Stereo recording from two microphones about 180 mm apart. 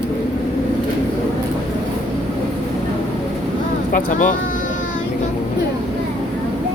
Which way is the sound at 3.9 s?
45° left (ahead or behind).